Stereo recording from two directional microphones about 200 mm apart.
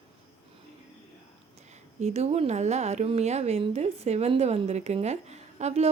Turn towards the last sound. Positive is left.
turn(degrees=-35)  # may be behind; listen again after turning